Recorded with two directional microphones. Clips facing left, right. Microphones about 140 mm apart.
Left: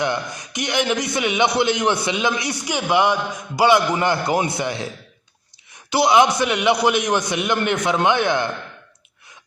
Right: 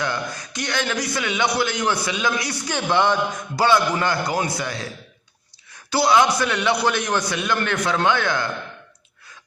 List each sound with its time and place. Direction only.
0.0 s a man's voice: 20° left (ahead or behind)
5.9 s a man's voice: 20° left (ahead or behind)